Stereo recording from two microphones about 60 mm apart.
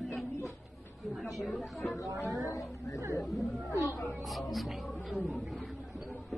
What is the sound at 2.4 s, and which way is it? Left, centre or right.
Speech, left.